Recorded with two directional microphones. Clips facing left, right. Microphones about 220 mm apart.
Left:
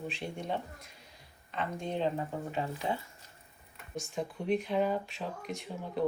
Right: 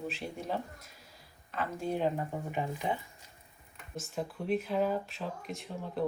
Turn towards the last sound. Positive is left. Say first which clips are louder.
# left 1 dB
turn(degrees=0)  # may be behind; listen again after turning